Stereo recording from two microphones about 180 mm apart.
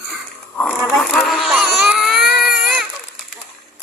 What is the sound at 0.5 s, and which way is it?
Speech, 5° left (ahead or behind).